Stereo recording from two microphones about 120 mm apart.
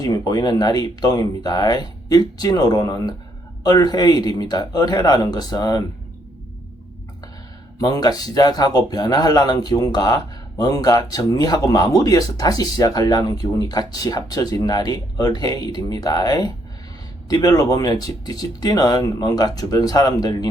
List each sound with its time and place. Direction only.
0.0 s speech: 30° left (ahead or behind)
7.8 s speech: 30° left (ahead or behind)